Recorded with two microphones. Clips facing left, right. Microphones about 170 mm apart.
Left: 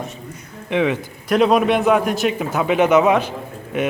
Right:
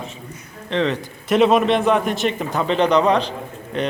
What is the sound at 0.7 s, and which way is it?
Speech, 10° left (ahead or behind).